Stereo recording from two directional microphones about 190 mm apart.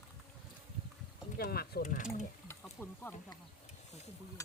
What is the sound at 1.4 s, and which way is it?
Speech, 55° left (ahead or behind).